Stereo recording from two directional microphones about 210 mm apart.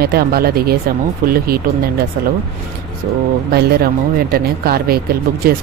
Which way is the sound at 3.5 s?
50° right (ahead or behind).